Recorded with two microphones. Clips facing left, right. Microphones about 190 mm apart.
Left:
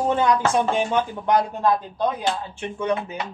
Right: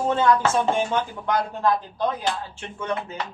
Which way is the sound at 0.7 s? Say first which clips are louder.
Left 2 dB; 20° left (ahead or behind).